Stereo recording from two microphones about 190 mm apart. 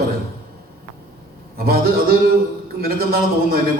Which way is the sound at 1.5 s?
55° right (ahead or behind).